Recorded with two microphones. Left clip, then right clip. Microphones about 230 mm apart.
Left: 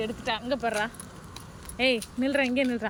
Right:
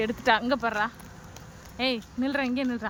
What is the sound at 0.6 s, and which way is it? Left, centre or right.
Speech, centre.